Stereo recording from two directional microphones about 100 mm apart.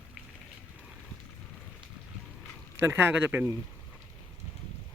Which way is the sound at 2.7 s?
20° right (ahead or behind).